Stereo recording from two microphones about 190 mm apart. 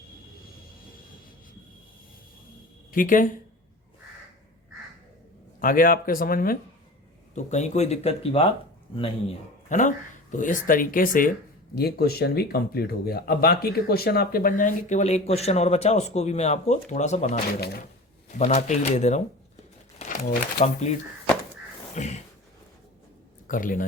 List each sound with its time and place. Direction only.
2.9 s speech: 45° left (ahead or behind)
5.5 s speech: 50° left (ahead or behind)
7.3 s speech: 35° left (ahead or behind)
9.6 s speech: 40° left (ahead or behind)
20.0 s crumpling: 40° left (ahead or behind)
21.9 s speech: 35° left (ahead or behind)
23.5 s speech: 45° left (ahead or behind)